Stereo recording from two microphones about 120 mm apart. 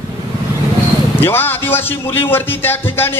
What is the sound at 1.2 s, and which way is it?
A man's voice, 15° left (ahead or behind).